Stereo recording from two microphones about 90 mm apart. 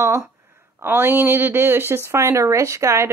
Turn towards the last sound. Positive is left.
turn(degrees=-30)  # may be behind; listen again after turning